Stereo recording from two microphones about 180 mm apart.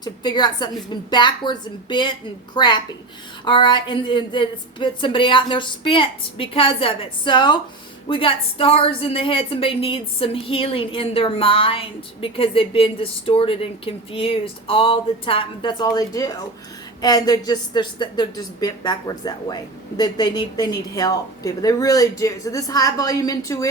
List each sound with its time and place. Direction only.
0.0 s a woman's voice: 25° left (ahead or behind)